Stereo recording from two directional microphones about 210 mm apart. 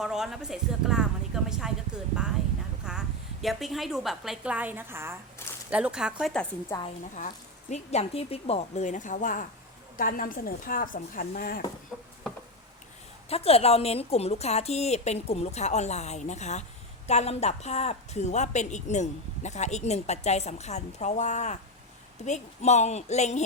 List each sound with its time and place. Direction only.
0.0 s a woman's voice: centre (ahead or behind)
2.8 s a woman's voice: 5° right (ahead or behind)
5.4 s a sound: 10° left (ahead or behind)
5.7 s a woman's voice: 5° right (ahead or behind)
7.2 s speech: 35° left (ahead or behind)
11.9 s a sound: 5° left (ahead or behind)
13.3 s speech: 30° left (ahead or behind)